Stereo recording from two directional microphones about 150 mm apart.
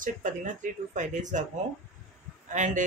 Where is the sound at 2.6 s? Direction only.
55° right (ahead or behind).